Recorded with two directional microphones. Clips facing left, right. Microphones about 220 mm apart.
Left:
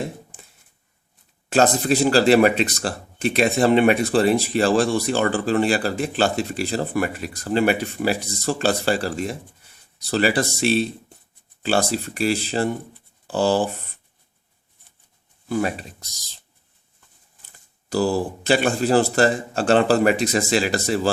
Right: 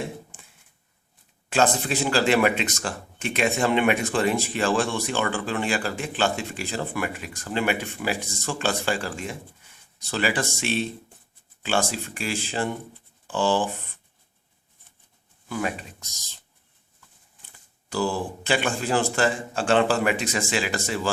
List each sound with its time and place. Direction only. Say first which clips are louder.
1.5 s speech: left 5 dB; 40° left (ahead or behind)
15.4 s speech: left 5 dB; 35° left (ahead or behind)
17.8 s speech: left 5 dB; 40° left (ahead or behind)